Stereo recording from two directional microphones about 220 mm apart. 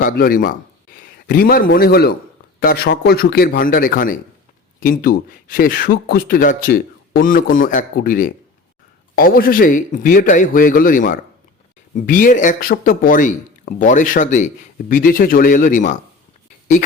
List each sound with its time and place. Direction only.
0.0 s a man's voice: 40° left (ahead or behind)